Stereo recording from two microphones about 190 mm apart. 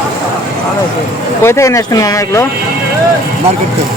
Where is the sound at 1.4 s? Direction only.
15° left (ahead or behind).